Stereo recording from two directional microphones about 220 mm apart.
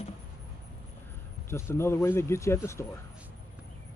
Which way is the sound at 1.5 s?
10° left (ahead or behind).